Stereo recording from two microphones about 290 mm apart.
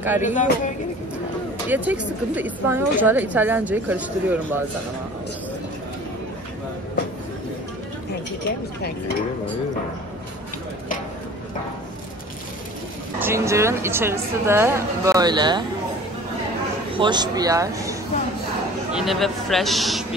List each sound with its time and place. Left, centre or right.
0.0 s a woman's voice: centre
0.3 s a woman's voice: left
1.7 s a woman's voice: centre
13.2 s a woman's voice: centre
16.9 s a woman's voice: centre
18.9 s a woman's voice: centre